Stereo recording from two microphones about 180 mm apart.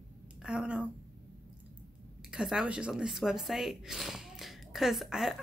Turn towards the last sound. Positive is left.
turn(degrees=0)  # may be behind; listen again after turning